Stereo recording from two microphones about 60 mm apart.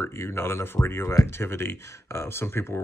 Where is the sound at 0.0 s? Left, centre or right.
Left.